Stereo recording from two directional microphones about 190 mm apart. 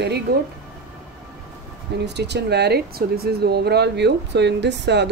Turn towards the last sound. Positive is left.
turn(degrees=-65)  # may be behind; listen again after turning